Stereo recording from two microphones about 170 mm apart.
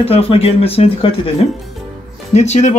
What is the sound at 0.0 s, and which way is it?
Speech, 35° left (ahead or behind).